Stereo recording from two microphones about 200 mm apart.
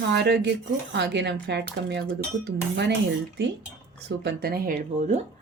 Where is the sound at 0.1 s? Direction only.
60° right (ahead or behind).